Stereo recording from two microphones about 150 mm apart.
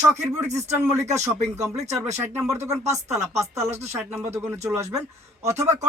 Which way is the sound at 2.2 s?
15° right (ahead or behind).